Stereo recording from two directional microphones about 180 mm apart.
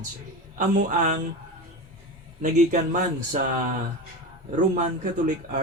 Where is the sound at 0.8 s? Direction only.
45° right (ahead or behind).